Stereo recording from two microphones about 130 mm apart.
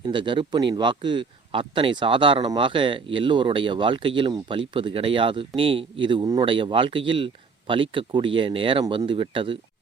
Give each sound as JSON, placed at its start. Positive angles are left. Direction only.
{"t": 0.0, "sound": "speech", "side_deg": -40}